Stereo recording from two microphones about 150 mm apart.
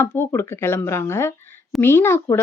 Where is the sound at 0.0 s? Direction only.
15° left (ahead or behind).